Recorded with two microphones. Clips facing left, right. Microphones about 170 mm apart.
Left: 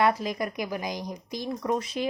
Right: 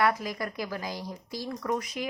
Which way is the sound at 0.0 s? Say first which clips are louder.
Left 3 dB; 25° left (ahead or behind).